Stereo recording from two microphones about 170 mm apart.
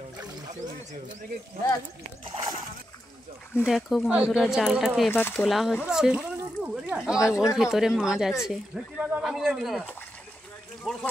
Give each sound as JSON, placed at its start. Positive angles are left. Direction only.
{"t": 2.2, "sound": "speech", "side_deg": -30}
{"t": 3.6, "sound": "speech", "side_deg": 0}
{"t": 5.1, "sound": "speech", "side_deg": 10}
{"t": 5.4, "sound": "speech", "side_deg": 0}